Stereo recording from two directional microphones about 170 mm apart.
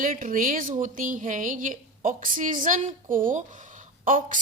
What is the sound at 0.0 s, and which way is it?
A woman's voice, 55° right (ahead or behind).